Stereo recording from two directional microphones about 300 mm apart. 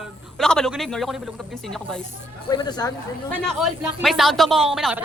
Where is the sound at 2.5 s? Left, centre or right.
Centre.